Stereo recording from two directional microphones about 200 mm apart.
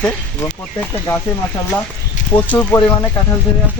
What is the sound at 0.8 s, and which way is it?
Speech, 10° left (ahead or behind).